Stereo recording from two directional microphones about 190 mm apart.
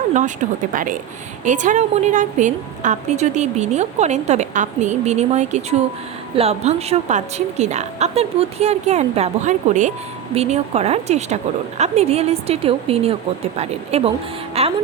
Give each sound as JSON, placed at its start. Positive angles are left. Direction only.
{"t": 0.7, "sound": "a woman's voice", "side_deg": -45}
{"t": 14.6, "sound": "music", "side_deg": -35}